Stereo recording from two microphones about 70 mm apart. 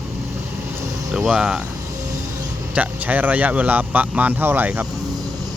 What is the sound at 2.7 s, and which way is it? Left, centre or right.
Speech, right.